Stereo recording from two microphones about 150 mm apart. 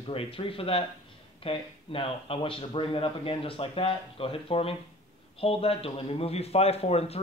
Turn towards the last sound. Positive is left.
turn(degrees=40)  # may be behind; listen again after turning